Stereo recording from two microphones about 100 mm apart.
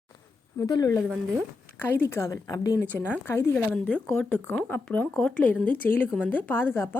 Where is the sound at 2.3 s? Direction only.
35° left (ahead or behind).